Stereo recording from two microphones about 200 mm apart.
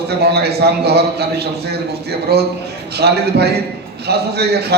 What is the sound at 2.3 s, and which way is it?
A man's voice, 55° right (ahead or behind).